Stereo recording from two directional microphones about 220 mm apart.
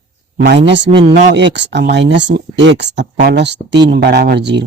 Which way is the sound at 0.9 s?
20° right (ahead or behind).